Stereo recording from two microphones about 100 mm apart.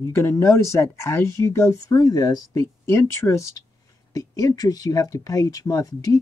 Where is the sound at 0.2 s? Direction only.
30° left (ahead or behind).